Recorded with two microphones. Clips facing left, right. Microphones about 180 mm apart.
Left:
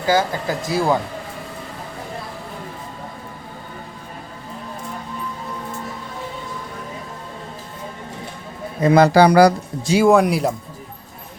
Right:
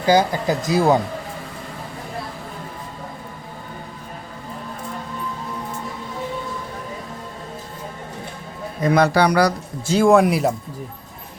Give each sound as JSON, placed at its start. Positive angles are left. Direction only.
{"t": 0.0, "sound": "speech", "side_deg": -15}
{"t": 8.8, "sound": "speech", "side_deg": 25}
{"t": 9.8, "sound": "speech", "side_deg": 10}
{"t": 10.1, "sound": "speech", "side_deg": 0}